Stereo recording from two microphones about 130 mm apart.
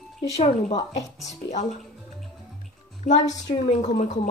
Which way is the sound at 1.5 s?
65° left (ahead or behind).